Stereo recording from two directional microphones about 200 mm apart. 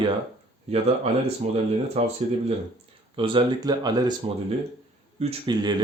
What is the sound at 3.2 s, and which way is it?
Speech, 25° right (ahead or behind).